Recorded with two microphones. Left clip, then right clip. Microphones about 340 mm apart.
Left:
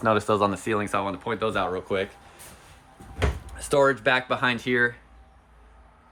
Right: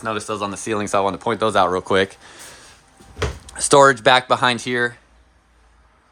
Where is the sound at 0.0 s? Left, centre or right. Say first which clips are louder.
Left 2 dB; centre; by 2.0 s right.